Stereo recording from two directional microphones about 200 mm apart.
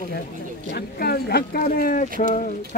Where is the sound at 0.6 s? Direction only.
50° left (ahead or behind).